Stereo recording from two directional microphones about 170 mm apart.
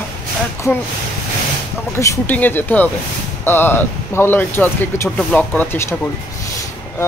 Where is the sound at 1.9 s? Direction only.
15° left (ahead or behind).